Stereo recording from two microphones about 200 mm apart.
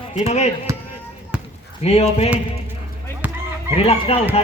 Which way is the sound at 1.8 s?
30° left (ahead or behind).